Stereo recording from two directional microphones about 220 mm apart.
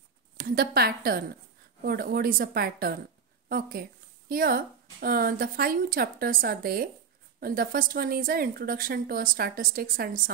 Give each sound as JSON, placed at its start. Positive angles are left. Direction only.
{"t": 0.4, "sound": "a woman's voice", "side_deg": -45}